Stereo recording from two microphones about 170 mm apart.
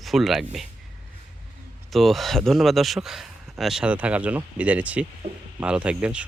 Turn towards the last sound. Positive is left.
turn(degrees=-5)  # may be behind; listen again after turning